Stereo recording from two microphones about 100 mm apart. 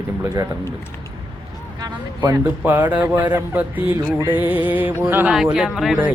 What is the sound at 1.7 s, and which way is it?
Speech, 40° right (ahead or behind).